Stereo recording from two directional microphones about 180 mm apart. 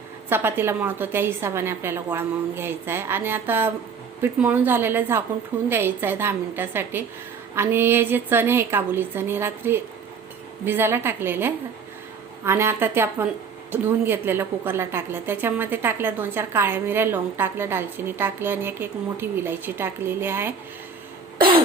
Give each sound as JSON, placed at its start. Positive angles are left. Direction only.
{"t": 0.3, "sound": "a woman's voice", "side_deg": -10}